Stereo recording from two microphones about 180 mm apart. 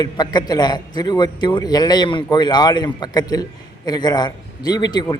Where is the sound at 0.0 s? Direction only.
20° left (ahead or behind).